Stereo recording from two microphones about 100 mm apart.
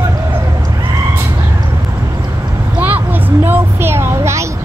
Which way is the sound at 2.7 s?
15° right (ahead or behind).